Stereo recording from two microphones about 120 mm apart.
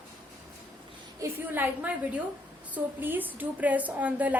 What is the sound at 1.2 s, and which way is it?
A woman's voice, 15° right (ahead or behind).